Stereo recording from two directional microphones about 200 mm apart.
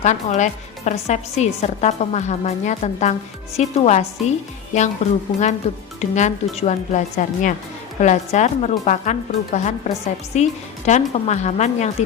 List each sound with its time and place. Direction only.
0.0 s a woman's voice: 35° left (ahead or behind)